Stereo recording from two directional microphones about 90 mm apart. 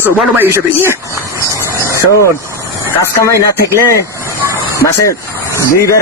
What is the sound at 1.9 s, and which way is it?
Vehicle, 30° left (ahead or behind).